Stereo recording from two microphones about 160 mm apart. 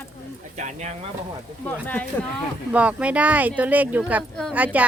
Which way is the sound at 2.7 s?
10° right (ahead or behind).